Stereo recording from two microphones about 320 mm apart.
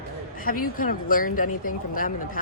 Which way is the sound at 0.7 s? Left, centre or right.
Left.